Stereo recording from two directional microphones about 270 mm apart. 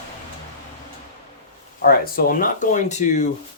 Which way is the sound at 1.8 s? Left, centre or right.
Left.